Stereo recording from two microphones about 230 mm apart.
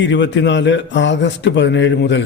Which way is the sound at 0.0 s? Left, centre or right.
Left.